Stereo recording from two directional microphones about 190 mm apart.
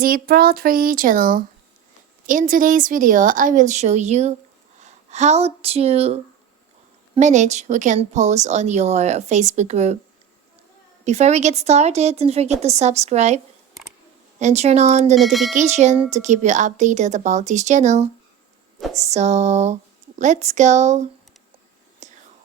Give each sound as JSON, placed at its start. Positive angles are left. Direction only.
{"t": 0.0, "sound": "a woman's voice", "side_deg": -50}
{"t": 7.2, "sound": "a woman's voice", "side_deg": -40}
{"t": 11.0, "sound": "a woman's voice", "side_deg": -35}
{"t": 15.1, "sound": "speech", "side_deg": 0}
{"t": 15.5, "sound": "a woman's voice", "side_deg": -35}
{"t": 22.0, "sound": "whispering", "side_deg": -40}